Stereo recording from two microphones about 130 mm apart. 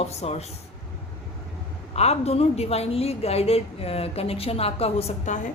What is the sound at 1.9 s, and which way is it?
A woman's voice, 55° left (ahead or behind).